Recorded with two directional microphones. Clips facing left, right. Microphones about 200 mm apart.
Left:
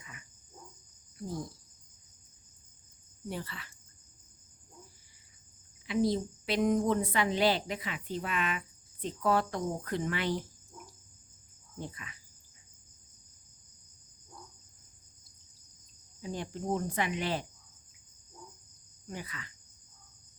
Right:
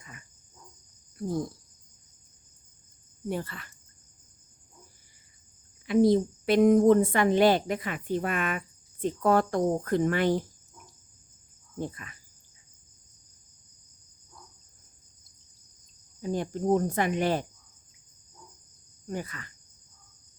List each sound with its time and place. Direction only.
0.0 s cricket: 40° right (ahead or behind)
3.2 s a woman's voice: 50° right (ahead or behind)
5.8 s a woman's voice: 50° right (ahead or behind)
11.8 s a woman's voice: 45° right (ahead or behind)
16.2 s a woman's voice: 45° right (ahead or behind)
19.0 s a woman's voice: 45° right (ahead or behind)